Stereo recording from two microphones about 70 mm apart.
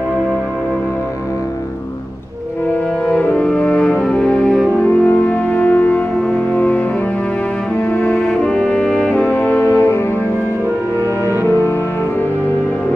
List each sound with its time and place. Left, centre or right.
3.1 s music: centre
6.1 s music: centre
6.5 s music: left
7.9 s brass instrument: centre
9.1 s music: left
11.4 s music: left